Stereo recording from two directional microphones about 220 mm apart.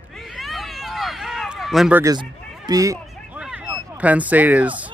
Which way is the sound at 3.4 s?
5° right (ahead or behind).